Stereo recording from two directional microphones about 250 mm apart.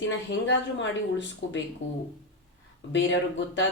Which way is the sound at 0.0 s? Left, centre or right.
Left.